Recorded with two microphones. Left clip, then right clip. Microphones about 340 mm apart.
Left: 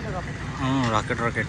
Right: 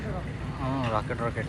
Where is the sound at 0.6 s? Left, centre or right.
Centre.